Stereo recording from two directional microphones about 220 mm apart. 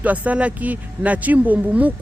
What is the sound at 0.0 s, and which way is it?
Speech, 5° right (ahead or behind).